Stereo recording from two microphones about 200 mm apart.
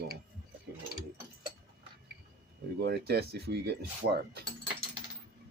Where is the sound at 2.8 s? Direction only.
55° right (ahead or behind).